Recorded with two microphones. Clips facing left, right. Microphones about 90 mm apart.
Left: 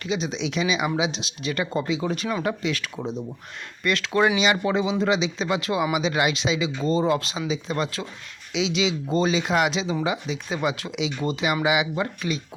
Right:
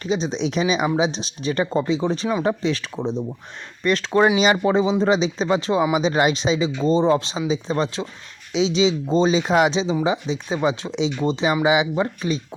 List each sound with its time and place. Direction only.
0.0 s speech: 35° right (ahead or behind)